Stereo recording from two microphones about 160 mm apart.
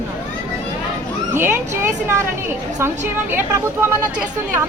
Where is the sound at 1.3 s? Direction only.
15° right (ahead or behind).